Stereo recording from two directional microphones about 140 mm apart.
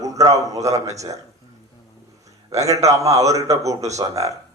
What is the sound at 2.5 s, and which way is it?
A man's voice, 25° right (ahead or behind).